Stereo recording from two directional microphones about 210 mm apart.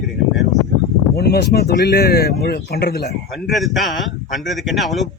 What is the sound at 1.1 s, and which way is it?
Speech, 50° left (ahead or behind).